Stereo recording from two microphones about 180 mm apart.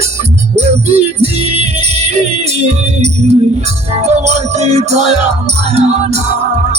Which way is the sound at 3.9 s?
40° right (ahead or behind).